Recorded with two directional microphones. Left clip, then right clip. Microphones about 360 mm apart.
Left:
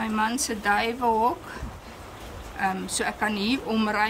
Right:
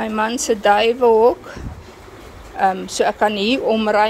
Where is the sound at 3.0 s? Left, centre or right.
Centre.